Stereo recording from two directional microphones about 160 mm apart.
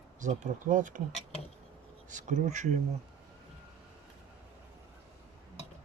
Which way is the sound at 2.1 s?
50° right (ahead or behind).